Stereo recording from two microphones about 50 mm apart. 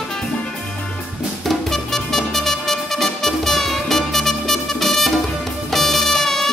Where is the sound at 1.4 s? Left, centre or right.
Centre.